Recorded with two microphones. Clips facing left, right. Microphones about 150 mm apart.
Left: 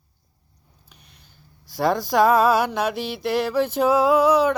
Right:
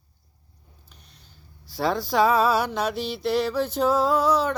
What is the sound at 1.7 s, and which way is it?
Speech, 20° left (ahead or behind).